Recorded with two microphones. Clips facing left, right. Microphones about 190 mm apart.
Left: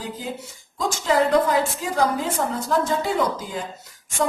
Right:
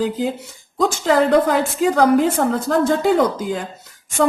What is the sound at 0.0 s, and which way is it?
A woman's voice, 70° right (ahead or behind).